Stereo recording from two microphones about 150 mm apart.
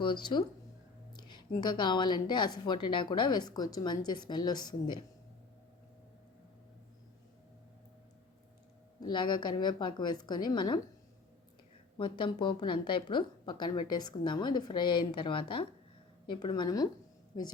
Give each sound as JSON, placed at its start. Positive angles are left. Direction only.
{"t": 0.0, "sound": "a woman's voice", "side_deg": 30}
{"t": 9.0, "sound": "a woman's voice", "side_deg": 30}
{"t": 11.9, "sound": "a woman's voice", "side_deg": 35}